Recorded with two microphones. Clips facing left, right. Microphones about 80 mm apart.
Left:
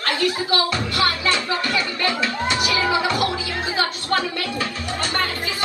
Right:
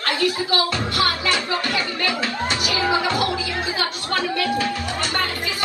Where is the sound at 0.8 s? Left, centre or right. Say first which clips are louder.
Even; right.